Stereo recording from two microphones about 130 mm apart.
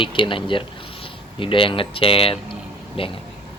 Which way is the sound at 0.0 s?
40° left (ahead or behind).